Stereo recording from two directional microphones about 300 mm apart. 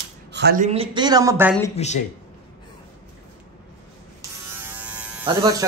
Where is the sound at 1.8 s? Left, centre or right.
Left.